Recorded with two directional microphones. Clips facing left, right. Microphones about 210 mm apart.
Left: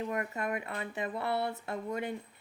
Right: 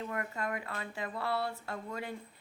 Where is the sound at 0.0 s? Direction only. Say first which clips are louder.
Left 3 dB; 20° left (ahead or behind).